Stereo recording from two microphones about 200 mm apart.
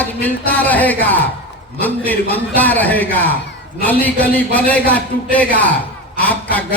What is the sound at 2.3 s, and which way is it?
A man's voice, 10° left (ahead or behind).